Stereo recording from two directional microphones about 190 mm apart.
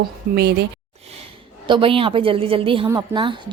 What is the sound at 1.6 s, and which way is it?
A woman's voice, 25° right (ahead or behind).